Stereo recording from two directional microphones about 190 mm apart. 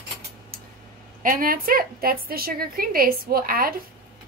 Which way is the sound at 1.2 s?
45° right (ahead or behind).